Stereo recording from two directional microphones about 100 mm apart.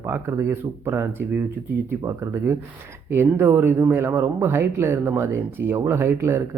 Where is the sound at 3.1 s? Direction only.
20° right (ahead or behind).